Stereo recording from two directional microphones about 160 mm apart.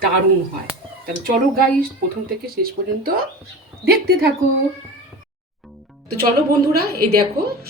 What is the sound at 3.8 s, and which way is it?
Speech, 70° right (ahead or behind).